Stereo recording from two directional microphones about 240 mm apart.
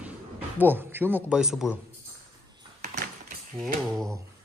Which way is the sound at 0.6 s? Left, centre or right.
Centre.